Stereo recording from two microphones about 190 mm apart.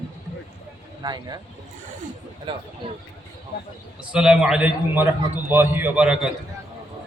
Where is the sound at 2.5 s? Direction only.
25° right (ahead or behind).